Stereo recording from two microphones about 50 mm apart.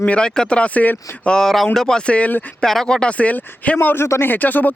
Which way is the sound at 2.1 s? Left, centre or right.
Left.